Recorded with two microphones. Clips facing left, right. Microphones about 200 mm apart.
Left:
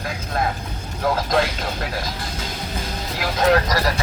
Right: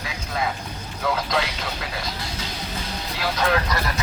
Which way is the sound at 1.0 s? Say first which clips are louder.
Left 4 dB; 50° left (ahead or behind).